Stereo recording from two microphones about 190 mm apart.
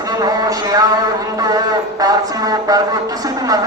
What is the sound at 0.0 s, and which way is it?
Speech, 20° right (ahead or behind).